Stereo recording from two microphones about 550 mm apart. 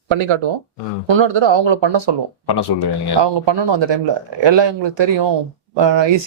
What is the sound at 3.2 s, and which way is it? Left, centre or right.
Speech, right.